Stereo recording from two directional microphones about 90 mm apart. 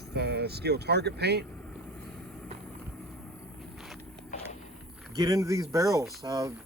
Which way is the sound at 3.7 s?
Centre (ahead or behind).